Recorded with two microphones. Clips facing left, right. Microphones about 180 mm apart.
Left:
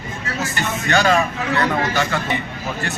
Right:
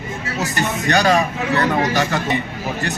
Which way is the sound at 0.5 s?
40° right (ahead or behind).